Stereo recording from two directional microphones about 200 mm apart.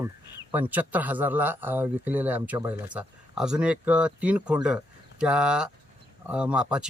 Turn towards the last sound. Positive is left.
turn(degrees=-5)  # may be behind; listen again after turning